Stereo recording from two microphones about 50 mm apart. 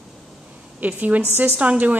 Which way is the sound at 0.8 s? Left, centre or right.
Right.